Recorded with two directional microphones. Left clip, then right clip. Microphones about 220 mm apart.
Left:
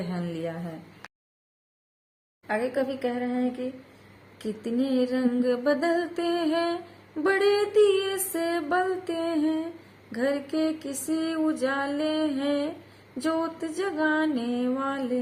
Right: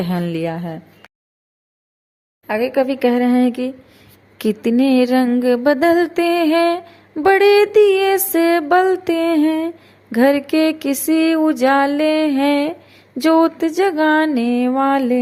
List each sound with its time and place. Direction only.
0.1 s music: 35° right (ahead or behind)
2.5 s speech: 35° right (ahead or behind)
4.4 s music: 35° right (ahead or behind)